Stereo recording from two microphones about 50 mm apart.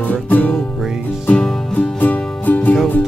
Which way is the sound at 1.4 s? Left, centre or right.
Centre.